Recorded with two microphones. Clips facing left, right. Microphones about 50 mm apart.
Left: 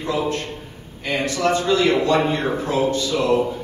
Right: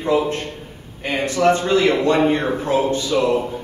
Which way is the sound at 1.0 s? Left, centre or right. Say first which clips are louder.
Right 4 dB; right.